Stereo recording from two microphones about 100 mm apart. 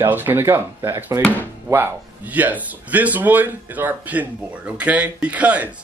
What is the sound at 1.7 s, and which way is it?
Speech, 20° right (ahead or behind).